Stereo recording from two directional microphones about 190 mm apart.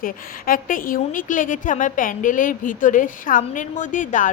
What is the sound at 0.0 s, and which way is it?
A woman's voice, 45° left (ahead or behind).